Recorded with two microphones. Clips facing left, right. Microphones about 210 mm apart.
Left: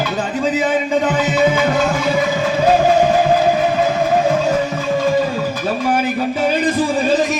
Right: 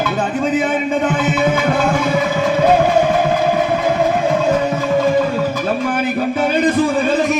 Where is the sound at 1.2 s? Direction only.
60° right (ahead or behind).